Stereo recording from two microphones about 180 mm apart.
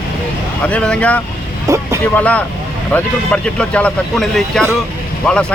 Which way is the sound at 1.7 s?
15° right (ahead or behind).